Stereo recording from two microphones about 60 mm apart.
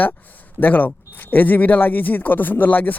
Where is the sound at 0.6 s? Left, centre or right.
Left.